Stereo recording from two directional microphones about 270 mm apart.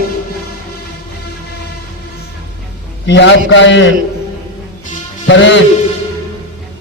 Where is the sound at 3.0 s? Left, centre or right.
Left.